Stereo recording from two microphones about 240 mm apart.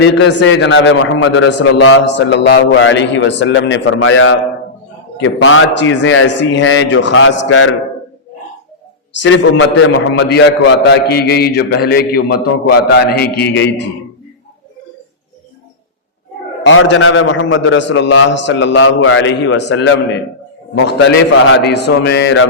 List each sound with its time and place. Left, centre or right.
0.0 s a man's voice: left
9.5 s a man's voice: left
16.6 s a man's voice: left